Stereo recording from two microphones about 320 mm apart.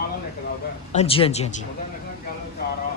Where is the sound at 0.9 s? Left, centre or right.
Centre.